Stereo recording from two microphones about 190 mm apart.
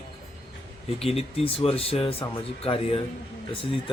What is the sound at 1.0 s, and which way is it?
Speech, 30° left (ahead or behind).